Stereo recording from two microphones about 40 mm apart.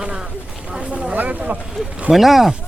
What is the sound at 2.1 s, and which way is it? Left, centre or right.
Speech, centre.